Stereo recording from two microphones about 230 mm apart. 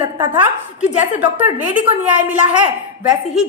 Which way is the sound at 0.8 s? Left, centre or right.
Left.